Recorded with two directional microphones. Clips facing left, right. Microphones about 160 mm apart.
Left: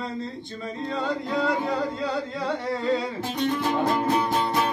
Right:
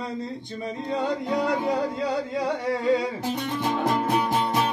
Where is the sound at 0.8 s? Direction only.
15° right (ahead or behind).